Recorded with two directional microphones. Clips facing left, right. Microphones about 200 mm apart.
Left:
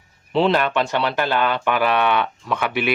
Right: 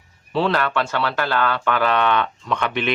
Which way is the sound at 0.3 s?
20° left (ahead or behind).